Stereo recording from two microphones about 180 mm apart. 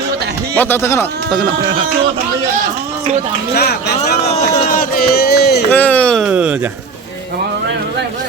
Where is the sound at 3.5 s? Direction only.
60° left (ahead or behind).